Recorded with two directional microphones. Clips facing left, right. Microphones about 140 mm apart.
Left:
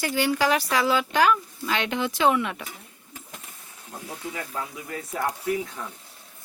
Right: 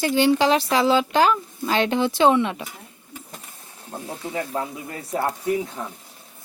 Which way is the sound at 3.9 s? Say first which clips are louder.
Right 4 dB; 30° right (ahead or behind).